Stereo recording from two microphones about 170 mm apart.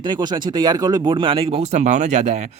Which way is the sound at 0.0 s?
25° right (ahead or behind).